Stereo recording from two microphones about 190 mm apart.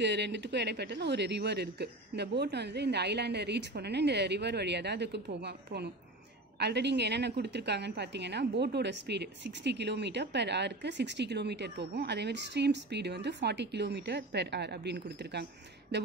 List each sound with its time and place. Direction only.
0.0 s a woman's voice: 65° right (ahead or behind)